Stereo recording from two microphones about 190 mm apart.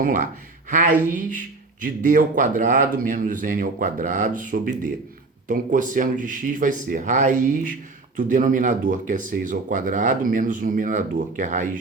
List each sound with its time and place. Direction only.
0.0 s speech: 45° right (ahead or behind)